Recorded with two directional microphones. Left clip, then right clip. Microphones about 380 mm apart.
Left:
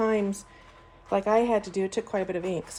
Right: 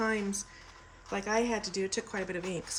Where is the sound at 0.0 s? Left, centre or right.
Centre.